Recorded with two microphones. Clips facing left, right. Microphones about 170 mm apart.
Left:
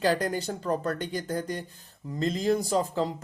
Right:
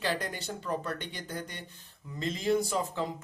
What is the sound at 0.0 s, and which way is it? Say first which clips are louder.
Speech: left 8 dB; 40° left (ahead or behind).